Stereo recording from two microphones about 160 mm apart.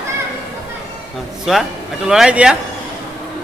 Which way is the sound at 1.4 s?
5° right (ahead or behind).